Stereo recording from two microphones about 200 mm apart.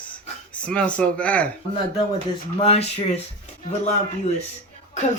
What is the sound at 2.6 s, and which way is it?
Speech, 30° left (ahead or behind).